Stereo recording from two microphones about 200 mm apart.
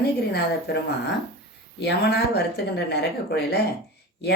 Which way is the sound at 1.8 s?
55° left (ahead or behind).